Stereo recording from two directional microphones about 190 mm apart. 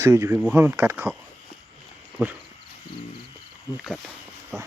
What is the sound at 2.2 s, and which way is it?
Speech, 10° right (ahead or behind).